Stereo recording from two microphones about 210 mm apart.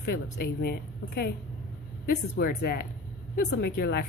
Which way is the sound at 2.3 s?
50° left (ahead or behind).